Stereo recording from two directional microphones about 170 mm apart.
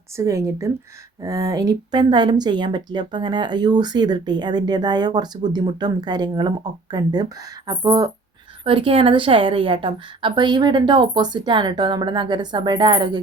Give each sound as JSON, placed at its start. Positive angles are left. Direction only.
{"t": 0.2, "sound": "speech", "side_deg": -20}
{"t": 8.6, "sound": "speech", "side_deg": -30}